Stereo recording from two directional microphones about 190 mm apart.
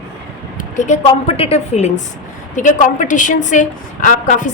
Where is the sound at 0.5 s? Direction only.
40° left (ahead or behind).